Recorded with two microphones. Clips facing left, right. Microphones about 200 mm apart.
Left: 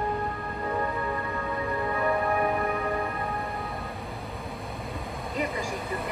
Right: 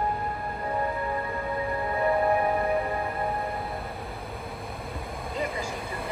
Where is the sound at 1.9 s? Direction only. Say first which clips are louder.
Right 4 dB; 30° right (ahead or behind).